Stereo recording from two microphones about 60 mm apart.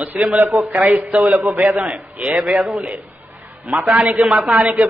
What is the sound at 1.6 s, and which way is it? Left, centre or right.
Speech, right.